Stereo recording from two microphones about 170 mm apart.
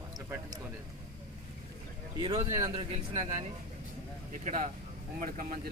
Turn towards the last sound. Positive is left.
turn(degrees=-55)  # may be behind; listen again after turning